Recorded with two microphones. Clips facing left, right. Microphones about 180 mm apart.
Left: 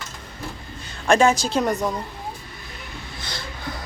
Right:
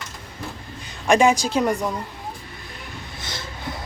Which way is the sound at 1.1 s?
15° right (ahead or behind).